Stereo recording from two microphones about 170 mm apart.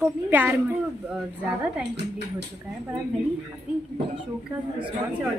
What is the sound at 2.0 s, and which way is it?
Speech, 80° right.